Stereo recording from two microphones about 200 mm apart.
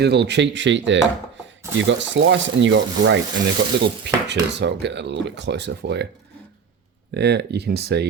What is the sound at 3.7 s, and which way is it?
Speech, 55° right (ahead or behind).